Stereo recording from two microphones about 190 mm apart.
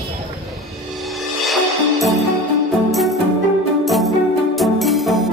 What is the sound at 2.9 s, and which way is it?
Music, centre (ahead or behind).